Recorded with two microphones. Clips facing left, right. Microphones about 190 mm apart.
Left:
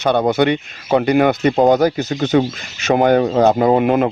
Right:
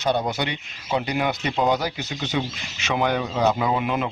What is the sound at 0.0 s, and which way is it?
Speech, 60° left (ahead or behind).